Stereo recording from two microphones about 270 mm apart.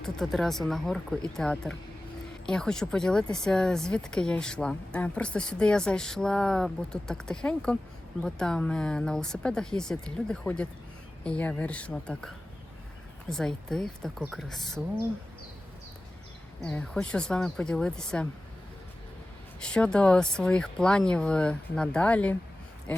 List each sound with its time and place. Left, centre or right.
0.0 s speech: centre
16.6 s speech: centre
19.6 s speech: centre